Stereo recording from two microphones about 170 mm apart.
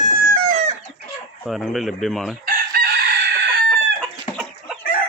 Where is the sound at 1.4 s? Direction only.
Centre (ahead or behind).